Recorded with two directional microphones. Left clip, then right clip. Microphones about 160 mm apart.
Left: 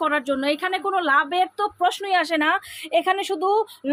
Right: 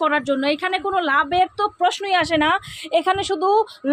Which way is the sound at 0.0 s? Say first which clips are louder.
Right 3 dB; 15° right (ahead or behind).